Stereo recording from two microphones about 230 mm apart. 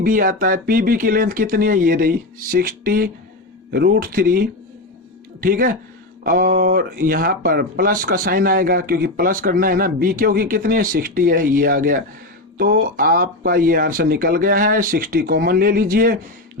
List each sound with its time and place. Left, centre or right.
0.0 s speech: right